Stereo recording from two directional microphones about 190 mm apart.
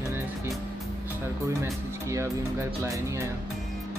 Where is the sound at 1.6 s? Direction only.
15° right (ahead or behind).